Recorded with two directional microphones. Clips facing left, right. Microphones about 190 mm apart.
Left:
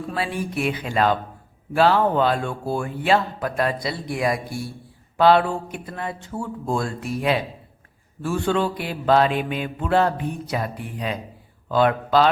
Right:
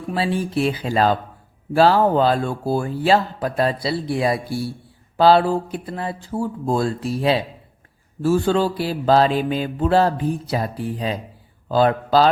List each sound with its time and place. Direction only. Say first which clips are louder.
0.1 s speech: right 6 dB; 30° right (ahead or behind)